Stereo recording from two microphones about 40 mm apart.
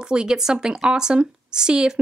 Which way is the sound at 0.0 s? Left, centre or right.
Right.